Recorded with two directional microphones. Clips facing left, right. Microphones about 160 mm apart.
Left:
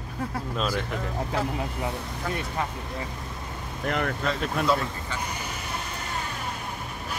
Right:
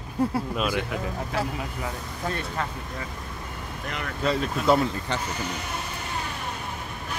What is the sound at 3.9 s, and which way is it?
Speech, 50° left (ahead or behind).